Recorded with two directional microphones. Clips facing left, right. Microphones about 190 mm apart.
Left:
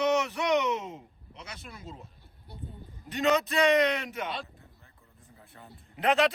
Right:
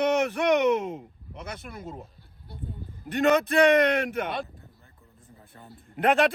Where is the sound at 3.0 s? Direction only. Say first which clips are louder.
Right 4 dB; 55° right (ahead or behind).